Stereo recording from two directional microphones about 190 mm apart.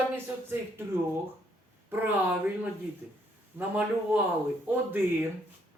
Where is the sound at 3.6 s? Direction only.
10° right (ahead or behind).